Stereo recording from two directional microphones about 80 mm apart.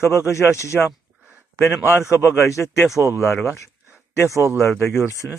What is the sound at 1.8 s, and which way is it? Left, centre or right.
A man's voice, left.